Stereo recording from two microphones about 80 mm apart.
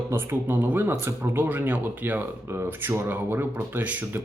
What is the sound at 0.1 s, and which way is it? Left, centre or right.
Speech, right.